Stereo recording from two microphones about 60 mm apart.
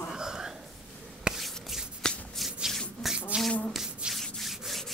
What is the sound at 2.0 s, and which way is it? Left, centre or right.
Shuffling cards, centre.